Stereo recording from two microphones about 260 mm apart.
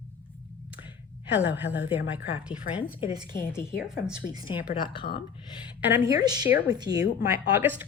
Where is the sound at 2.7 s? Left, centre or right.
Centre.